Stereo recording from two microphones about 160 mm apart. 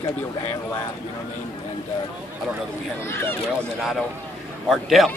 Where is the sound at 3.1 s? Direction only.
15° left (ahead or behind).